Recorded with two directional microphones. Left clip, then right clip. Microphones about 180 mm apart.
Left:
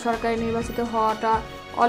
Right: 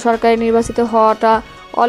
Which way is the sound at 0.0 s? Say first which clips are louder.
Right 11 dB; 40° right (ahead or behind).